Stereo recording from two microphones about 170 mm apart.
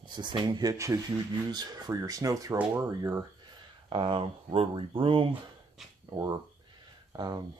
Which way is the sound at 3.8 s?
30° right (ahead or behind).